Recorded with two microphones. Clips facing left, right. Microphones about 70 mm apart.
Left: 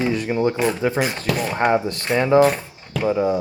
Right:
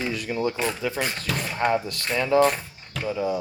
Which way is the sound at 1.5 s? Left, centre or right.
Left.